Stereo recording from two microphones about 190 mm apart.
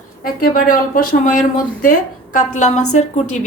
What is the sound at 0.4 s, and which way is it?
Speech, 50° left (ahead or behind).